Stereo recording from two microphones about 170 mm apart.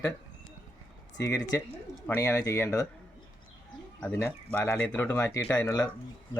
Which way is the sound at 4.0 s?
10° left (ahead or behind).